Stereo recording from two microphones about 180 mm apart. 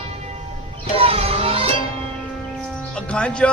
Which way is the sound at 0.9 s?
30° right (ahead or behind).